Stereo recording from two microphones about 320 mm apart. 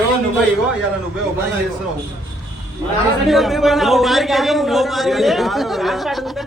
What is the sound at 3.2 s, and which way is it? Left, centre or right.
A man's voice, centre.